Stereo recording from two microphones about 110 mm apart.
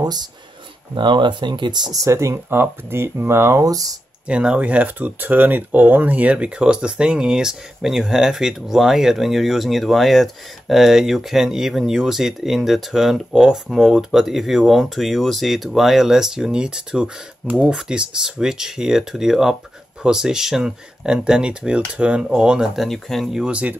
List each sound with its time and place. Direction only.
0.0 s speech: 40° right (ahead or behind)
4.3 s speech: 10° right (ahead or behind)